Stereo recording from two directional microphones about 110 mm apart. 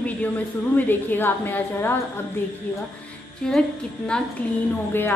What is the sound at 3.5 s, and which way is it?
Speech, 5° left (ahead or behind).